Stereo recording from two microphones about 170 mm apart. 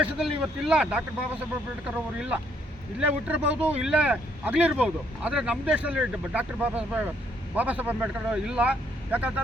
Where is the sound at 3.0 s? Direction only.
10° right (ahead or behind).